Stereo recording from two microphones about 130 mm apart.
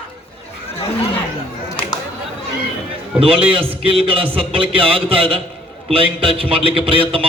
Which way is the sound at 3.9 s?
45° right (ahead or behind).